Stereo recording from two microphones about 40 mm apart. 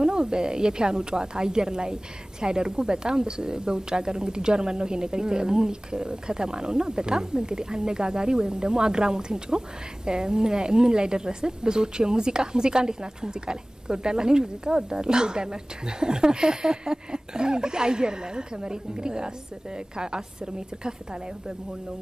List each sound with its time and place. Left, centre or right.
0.0 s speech: centre